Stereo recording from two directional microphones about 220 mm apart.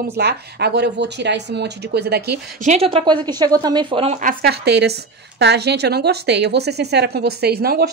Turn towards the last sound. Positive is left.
turn(degrees=-45)  # may be behind; listen again after turning